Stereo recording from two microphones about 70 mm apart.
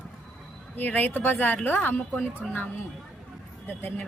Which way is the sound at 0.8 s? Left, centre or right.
Left.